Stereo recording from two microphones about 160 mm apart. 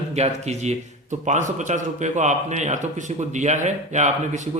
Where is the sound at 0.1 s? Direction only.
45° right (ahead or behind).